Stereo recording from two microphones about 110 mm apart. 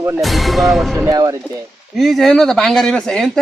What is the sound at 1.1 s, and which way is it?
Speech, 35° right (ahead or behind).